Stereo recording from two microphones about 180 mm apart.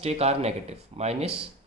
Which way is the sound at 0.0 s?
35° right (ahead or behind).